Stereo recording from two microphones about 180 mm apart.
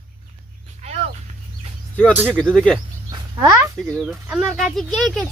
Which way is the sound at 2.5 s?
5° left (ahead or behind).